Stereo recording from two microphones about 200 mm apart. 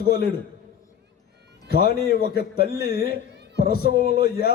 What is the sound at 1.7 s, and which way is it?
A man's voice, 50° left (ahead or behind).